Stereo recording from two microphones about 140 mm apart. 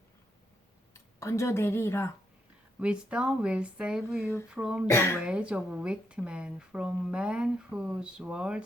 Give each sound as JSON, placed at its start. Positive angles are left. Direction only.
{"t": 0.9, "sound": "speech", "side_deg": 20}
{"t": 2.8, "sound": "speech", "side_deg": -5}
{"t": 4.9, "sound": "speech", "side_deg": 20}
{"t": 5.2, "sound": "speech", "side_deg": -10}